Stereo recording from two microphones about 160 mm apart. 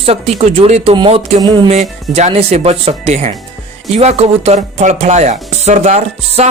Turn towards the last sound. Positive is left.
turn(degrees=-45)  # may be behind; listen again after turning